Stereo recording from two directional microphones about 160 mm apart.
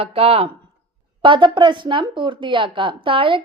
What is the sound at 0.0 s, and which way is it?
A woman's voice, 35° right (ahead or behind).